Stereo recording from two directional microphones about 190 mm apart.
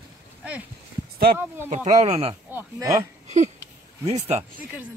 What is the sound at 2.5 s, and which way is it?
Speech, 15° right (ahead or behind).